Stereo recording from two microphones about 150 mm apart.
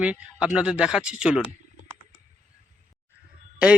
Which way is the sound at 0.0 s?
5° right (ahead or behind).